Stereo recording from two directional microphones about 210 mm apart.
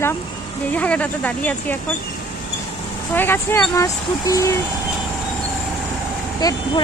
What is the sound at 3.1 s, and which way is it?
Speech, 10° left (ahead or behind).